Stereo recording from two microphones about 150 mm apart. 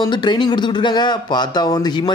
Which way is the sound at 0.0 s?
30° left (ahead or behind).